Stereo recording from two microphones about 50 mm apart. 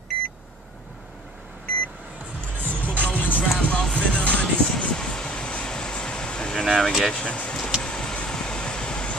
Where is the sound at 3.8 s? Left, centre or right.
Centre.